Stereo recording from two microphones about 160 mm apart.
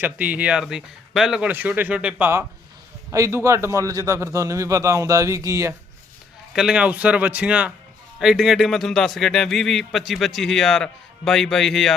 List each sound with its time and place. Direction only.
0.0 s a man's voice: 10° right (ahead or behind)
6.5 s speech: 5° right (ahead or behind)